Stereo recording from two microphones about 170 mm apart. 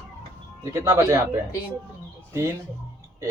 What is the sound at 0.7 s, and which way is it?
Speech, 15° right (ahead or behind).